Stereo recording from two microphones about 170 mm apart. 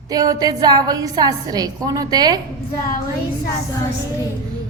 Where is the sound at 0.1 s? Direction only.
20° right (ahead or behind).